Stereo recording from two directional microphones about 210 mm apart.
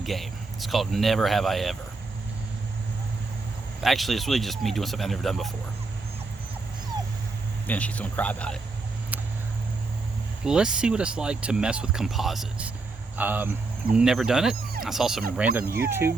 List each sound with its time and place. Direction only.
0.0 s speech: centre (ahead or behind)
3.8 s speech: centre (ahead or behind)
7.7 s speech: 5° left (ahead or behind)
10.4 s speech: 5° right (ahead or behind)
15.6 s speech: 45° right (ahead or behind)
15.9 s speech: 10° right (ahead or behind)